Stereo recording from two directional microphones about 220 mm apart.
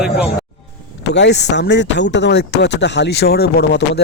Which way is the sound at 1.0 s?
50° left (ahead or behind).